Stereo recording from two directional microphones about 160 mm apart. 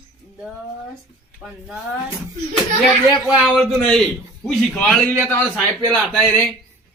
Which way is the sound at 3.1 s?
5° right (ahead or behind).